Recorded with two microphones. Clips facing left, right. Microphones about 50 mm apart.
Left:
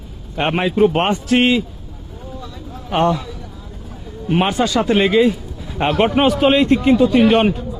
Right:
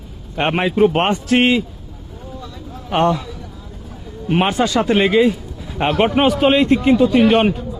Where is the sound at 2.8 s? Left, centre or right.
Right.